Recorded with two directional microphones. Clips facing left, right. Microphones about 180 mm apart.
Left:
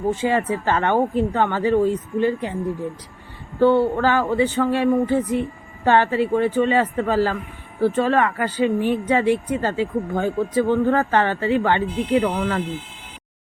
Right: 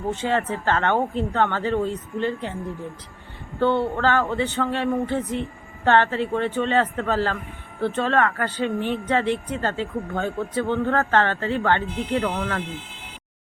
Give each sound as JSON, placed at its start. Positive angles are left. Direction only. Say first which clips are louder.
{"t": 0.1, "sound": "a woman's voice", "louder": "left 2 dB", "side_deg": 10}
{"t": 3.6, "sound": "a woman's voice", "louder": "left 5 dB", "side_deg": 10}